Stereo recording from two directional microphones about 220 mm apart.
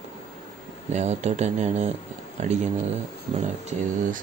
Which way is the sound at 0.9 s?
30° right (ahead or behind).